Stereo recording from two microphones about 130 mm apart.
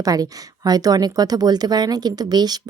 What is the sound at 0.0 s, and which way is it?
Speech, 30° right (ahead or behind).